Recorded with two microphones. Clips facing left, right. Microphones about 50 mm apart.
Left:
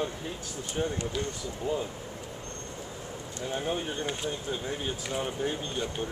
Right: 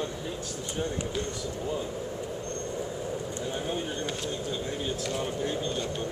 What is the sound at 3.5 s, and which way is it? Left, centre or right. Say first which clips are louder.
Speech: left 3 dB; centre.